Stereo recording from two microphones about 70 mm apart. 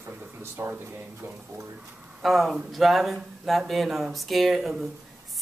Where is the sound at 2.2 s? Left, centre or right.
Centre.